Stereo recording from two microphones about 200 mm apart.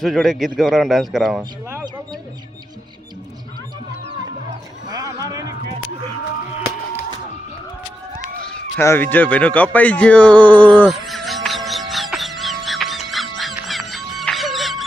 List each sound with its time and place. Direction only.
0.0 s a man's voice: centre (ahead or behind)
4.9 s music: 20° right (ahead or behind)
8.8 s speech: 10° left (ahead or behind)
10.8 s music: centre (ahead or behind)